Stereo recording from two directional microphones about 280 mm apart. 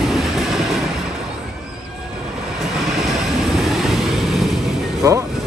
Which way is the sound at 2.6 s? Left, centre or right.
Centre.